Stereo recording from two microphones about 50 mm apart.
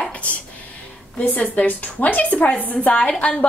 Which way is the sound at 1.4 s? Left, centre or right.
Left.